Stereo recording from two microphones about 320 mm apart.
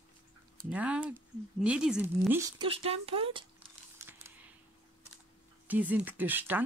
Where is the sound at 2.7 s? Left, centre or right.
Centre.